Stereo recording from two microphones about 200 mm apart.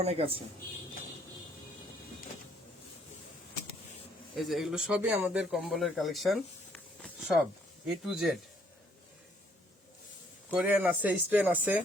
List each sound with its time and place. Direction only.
0.0 s speech: 30° right (ahead or behind)
4.4 s speech: centre (ahead or behind)
10.5 s speech: 5° right (ahead or behind)